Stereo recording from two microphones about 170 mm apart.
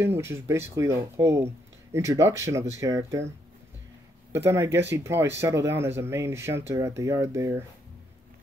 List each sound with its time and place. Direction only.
0.0 s speech: 15° right (ahead or behind)
4.3 s speech: 15° right (ahead or behind)